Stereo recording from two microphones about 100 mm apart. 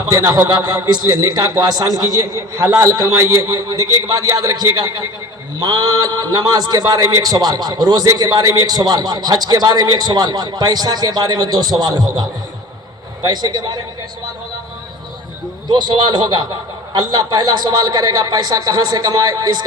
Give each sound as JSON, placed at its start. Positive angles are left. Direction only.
{"t": 0.1, "sound": "a man's voice", "side_deg": -35}
{"t": 15.6, "sound": "a man's voice", "side_deg": -45}